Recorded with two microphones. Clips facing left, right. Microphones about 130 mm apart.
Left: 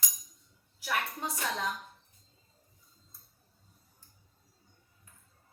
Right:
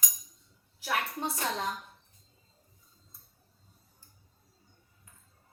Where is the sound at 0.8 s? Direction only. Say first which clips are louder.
Right 2 dB; 30° right (ahead or behind).